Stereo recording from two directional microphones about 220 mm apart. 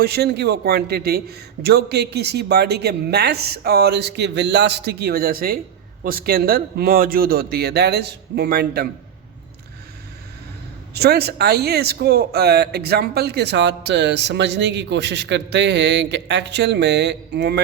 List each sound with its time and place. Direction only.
0.0 s speech: 45° right (ahead or behind)
10.9 s speech: 45° right (ahead or behind)